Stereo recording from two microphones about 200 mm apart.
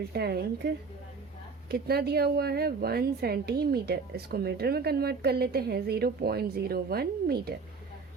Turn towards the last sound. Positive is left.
turn(degrees=-50)  # may be behind; listen again after turning